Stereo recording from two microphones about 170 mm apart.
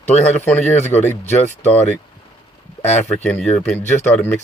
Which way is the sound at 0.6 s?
40° left (ahead or behind).